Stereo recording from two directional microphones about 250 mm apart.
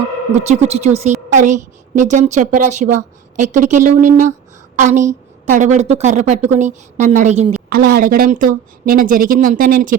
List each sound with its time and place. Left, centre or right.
0.3 s a woman's voice: right
7.8 s a woman's voice: right